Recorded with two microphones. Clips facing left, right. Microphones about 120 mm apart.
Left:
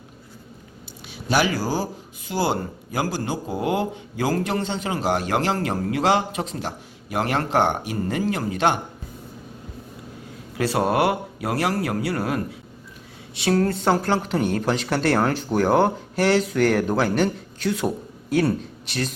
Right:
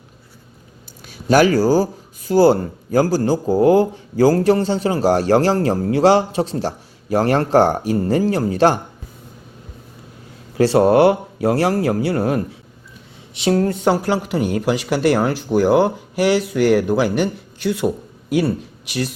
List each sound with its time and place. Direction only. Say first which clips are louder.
1.1 s speech: right 8 dB; 45° right (ahead or behind)
10.6 s speech: right 8 dB; 30° right (ahead or behind); by 19.1 s 10° right (ahead or behind)